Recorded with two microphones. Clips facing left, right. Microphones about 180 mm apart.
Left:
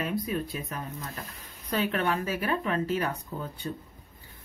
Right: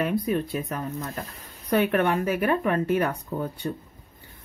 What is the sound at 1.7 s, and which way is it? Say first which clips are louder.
Speech: right 6 dB; 60° right (ahead or behind).